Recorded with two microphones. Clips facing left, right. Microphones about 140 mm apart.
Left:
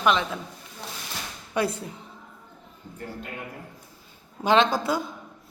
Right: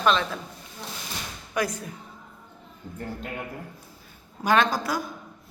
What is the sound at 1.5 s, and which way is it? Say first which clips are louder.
Speech: left 2 dB; 25° left (ahead or behind).